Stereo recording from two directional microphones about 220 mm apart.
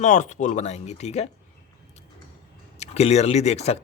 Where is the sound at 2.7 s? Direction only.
30° left (ahead or behind).